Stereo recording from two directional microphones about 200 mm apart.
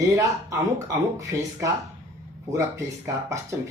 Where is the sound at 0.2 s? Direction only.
15° right (ahead or behind).